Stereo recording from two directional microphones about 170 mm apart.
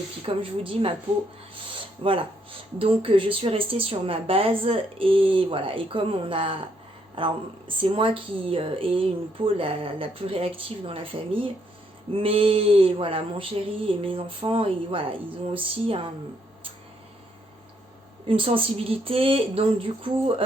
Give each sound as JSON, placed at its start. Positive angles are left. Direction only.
{"t": 0.2, "sound": "speech", "side_deg": -35}
{"t": 18.3, "sound": "speech", "side_deg": -30}